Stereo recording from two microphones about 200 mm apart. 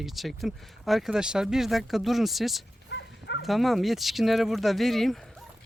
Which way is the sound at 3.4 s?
Centre (ahead or behind).